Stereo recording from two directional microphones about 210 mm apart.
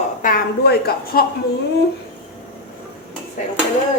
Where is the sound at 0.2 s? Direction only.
45° left (ahead or behind).